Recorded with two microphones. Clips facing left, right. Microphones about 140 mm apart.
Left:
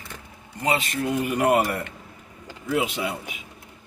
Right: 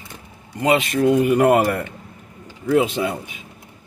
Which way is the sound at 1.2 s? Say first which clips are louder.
Right 6 dB; 50° right (ahead or behind).